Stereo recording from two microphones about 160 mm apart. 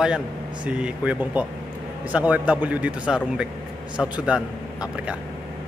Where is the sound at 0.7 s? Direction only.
5° right (ahead or behind).